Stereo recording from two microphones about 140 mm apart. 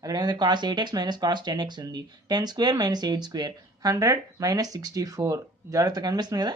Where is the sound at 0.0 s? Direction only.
30° right (ahead or behind).